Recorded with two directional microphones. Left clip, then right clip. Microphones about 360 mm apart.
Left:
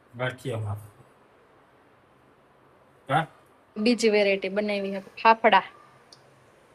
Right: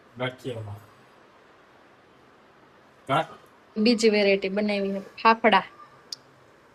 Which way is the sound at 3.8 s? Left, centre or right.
Centre.